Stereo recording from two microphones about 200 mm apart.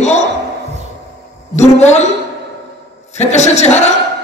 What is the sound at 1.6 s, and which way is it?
Speech, 35° left (ahead or behind).